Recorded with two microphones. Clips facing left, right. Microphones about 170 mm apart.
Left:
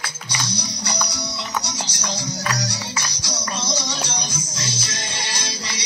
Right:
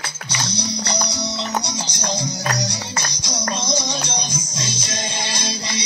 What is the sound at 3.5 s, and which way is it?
Music, 15° right (ahead or behind).